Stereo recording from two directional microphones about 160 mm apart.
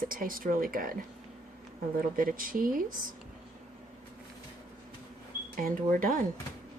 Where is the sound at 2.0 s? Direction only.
60° right (ahead or behind).